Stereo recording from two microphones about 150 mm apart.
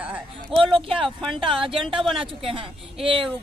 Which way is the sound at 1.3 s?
35° right (ahead or behind).